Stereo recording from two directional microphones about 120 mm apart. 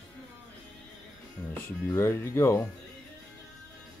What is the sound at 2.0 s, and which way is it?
Speech, 20° left (ahead or behind).